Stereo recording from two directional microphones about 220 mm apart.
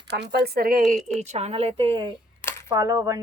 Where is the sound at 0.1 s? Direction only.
50° right (ahead or behind); by 2.1 s 20° right (ahead or behind).